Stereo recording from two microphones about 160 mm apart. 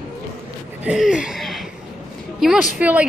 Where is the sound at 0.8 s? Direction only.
5° right (ahead or behind).